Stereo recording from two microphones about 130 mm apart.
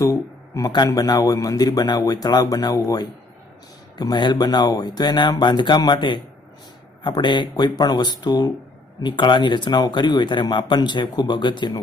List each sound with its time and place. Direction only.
0.0 s speech: 25° left (ahead or behind)